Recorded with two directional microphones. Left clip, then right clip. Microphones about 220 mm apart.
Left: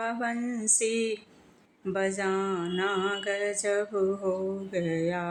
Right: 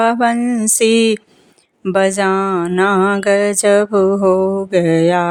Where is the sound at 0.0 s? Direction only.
50° right (ahead or behind).